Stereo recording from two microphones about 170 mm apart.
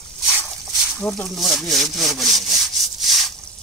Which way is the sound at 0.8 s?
Centre (ahead or behind).